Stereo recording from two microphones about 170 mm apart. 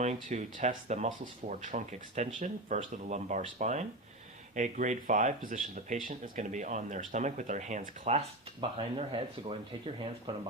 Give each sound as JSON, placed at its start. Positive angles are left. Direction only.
{"t": 0.0, "sound": "speech", "side_deg": -45}